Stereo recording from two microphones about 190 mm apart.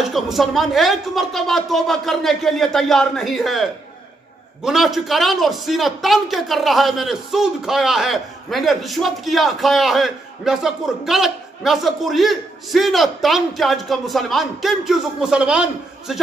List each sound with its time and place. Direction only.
0.0 s a man's voice: centre (ahead or behind)
4.6 s a man's voice: centre (ahead or behind)